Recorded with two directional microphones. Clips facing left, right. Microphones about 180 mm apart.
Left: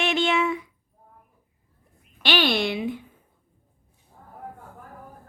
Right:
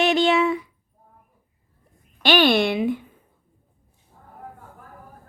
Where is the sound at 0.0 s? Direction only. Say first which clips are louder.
Right 5 dB; 35° right (ahead or behind).